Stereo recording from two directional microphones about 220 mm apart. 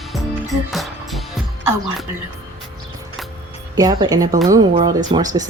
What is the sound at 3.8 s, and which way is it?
Speech, 20° right (ahead or behind).